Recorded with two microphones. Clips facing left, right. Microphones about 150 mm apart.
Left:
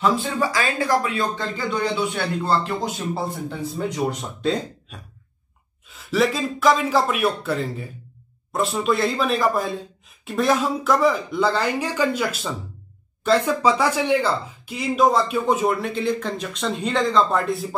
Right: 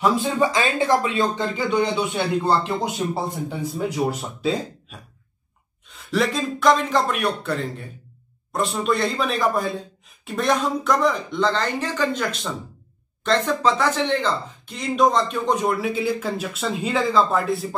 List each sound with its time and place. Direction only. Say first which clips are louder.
0.0 s speech: right 2 dB; 20° right (ahead or behind)
3.4 s speech: right 1 dB; 5° right (ahead or behind)